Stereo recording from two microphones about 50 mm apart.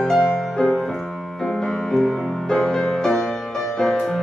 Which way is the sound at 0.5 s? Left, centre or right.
Centre.